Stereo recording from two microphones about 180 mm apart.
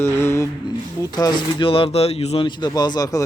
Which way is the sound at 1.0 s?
20° left (ahead or behind).